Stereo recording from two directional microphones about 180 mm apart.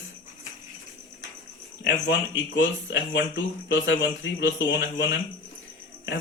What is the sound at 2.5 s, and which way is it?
Speech, 85° left.